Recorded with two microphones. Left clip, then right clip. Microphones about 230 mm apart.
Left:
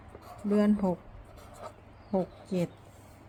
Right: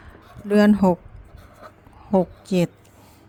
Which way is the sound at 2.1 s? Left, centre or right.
Right.